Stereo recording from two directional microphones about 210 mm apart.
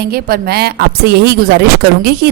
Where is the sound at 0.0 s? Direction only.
45° right (ahead or behind).